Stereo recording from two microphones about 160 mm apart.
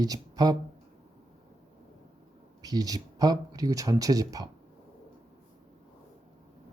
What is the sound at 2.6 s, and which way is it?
Speech, 25° right (ahead or behind).